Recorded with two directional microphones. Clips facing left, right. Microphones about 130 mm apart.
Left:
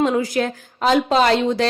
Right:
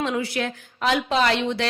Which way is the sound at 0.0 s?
40° left (ahead or behind).